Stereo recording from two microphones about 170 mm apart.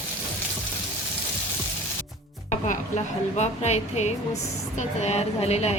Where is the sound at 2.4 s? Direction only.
45° left (ahead or behind).